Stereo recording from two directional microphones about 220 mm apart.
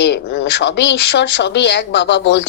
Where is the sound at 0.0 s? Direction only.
50° left (ahead or behind).